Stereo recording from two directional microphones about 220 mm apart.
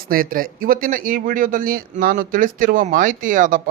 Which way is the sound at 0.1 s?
40° right (ahead or behind).